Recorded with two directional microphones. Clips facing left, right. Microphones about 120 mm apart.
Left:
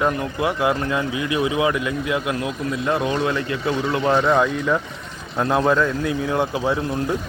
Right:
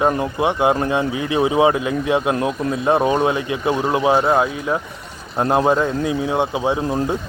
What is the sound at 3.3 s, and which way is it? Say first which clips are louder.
Speech: right 3 dB; 15° right (ahead or behind).